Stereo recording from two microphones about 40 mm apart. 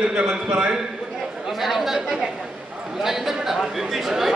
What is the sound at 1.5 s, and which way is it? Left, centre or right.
Chatter, centre.